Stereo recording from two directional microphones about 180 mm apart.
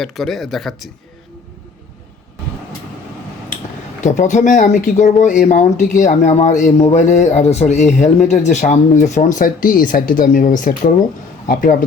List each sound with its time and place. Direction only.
0.0 s speech: centre (ahead or behind)
4.0 s speech: 45° left (ahead or behind)